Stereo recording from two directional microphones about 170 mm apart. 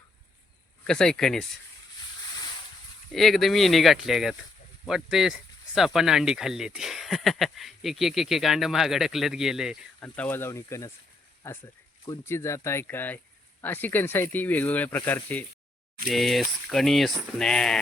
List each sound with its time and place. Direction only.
0.9 s speech: 5° left (ahead or behind)
3.1 s speech: centre (ahead or behind)
10.0 s speech: 10° left (ahead or behind)